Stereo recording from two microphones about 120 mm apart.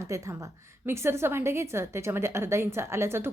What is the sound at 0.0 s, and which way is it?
A woman's voice, 25° right (ahead or behind).